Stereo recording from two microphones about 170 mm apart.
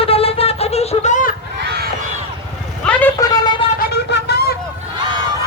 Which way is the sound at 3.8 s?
70° left (ahead or behind).